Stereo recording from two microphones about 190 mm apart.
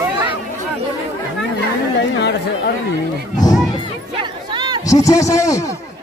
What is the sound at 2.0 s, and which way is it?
Speech, 65° left (ahead or behind).